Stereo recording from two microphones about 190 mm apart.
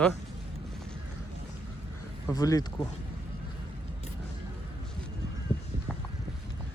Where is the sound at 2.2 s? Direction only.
20° left (ahead or behind).